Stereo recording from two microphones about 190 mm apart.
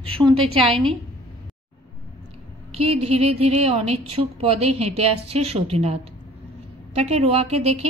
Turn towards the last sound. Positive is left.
turn(degrees=-35)  # may be behind; listen again after turning